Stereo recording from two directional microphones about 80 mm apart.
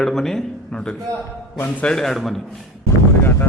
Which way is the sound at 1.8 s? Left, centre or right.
Centre.